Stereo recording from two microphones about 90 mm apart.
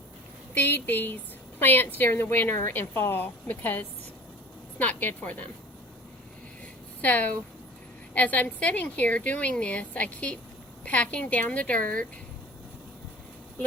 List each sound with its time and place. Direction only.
0.5 s a woman's voice: 20° left (ahead or behind)
7.0 s a woman's voice: 15° left (ahead or behind)